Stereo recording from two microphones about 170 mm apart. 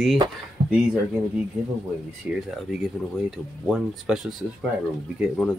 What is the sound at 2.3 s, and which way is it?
Speech, 5° right (ahead or behind).